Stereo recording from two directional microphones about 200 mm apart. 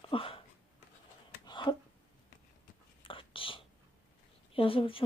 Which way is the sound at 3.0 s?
25° left (ahead or behind).